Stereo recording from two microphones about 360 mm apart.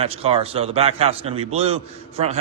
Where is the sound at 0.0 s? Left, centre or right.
Centre.